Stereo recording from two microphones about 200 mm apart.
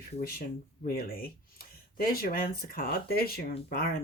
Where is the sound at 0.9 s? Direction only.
45° left (ahead or behind).